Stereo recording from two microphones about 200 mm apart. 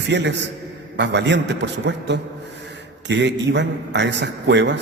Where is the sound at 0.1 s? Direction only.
60° right (ahead or behind).